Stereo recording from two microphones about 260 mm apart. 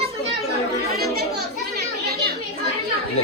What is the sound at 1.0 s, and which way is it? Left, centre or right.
Speech, right.